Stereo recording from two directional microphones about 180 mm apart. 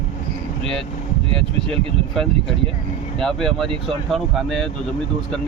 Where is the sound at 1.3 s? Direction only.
30° right (ahead or behind).